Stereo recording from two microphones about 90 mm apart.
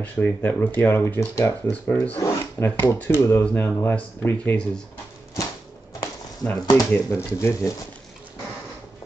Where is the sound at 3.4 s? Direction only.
20° left (ahead or behind).